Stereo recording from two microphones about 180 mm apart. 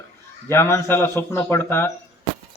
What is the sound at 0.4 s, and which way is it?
Speech, 15° left (ahead or behind).